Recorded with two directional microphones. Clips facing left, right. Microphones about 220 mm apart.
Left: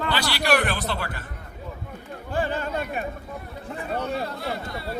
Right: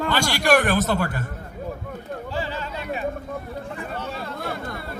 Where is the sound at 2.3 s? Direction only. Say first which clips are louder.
Left 6 dB; 50° left (ahead or behind).